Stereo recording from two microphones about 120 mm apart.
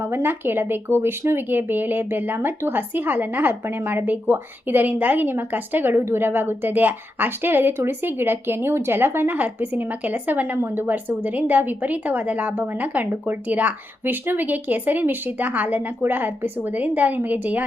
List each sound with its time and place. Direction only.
0.0 s speech: 20° right (ahead or behind)